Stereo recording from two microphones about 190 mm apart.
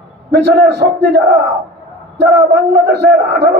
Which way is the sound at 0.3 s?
65° right (ahead or behind).